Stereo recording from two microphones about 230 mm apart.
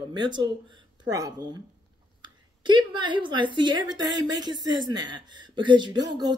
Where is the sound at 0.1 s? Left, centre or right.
Centre.